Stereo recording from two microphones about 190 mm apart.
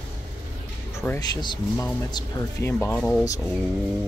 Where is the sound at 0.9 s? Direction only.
15° left (ahead or behind).